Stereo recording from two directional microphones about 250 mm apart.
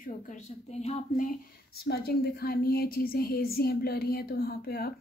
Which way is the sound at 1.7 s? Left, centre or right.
Left.